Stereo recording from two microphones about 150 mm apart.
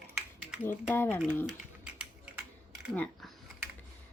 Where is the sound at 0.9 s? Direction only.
15° left (ahead or behind).